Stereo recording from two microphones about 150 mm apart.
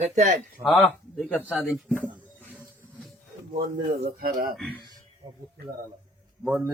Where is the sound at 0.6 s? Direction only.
5° left (ahead or behind).